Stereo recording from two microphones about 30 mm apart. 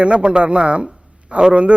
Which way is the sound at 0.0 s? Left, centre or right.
Right.